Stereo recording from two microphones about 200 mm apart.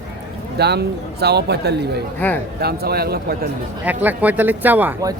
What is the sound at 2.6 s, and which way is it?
Speech, 50° right (ahead or behind).